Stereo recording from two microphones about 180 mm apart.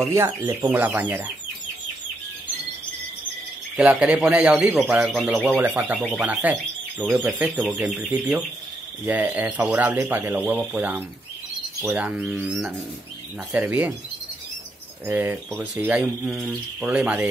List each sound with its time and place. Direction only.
0.0 s speech: 15° right (ahead or behind)
3.7 s speech: 5° right (ahead or behind)
15.0 s speech: 10° right (ahead or behind)